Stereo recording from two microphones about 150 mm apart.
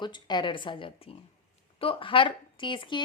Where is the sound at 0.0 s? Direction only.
30° left (ahead or behind).